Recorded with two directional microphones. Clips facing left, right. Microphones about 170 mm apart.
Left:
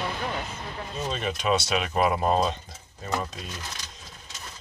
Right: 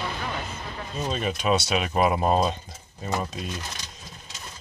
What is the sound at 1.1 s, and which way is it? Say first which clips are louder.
Speech: right 2 dB; 5° right (ahead or behind).